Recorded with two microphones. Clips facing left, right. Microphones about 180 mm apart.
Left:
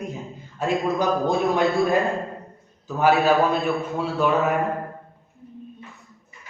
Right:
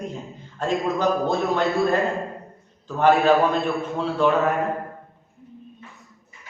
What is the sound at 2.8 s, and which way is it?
A man's voice, 5° left (ahead or behind).